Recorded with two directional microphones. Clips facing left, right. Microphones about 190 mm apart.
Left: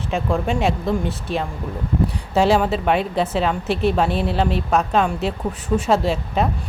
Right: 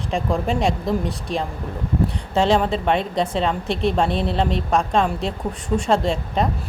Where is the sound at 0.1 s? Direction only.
Centre (ahead or behind).